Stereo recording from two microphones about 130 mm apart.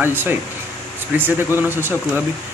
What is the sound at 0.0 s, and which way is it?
Speech, 15° right (ahead or behind).